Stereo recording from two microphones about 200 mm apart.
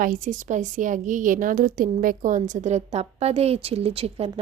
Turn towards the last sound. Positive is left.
turn(degrees=-30)  # may be behind; listen again after turning